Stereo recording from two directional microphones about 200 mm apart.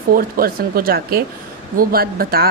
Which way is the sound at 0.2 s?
45° right (ahead or behind).